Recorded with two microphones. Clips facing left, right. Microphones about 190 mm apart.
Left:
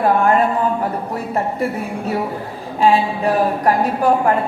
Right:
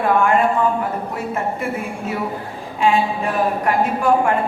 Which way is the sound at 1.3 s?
35° left (ahead or behind).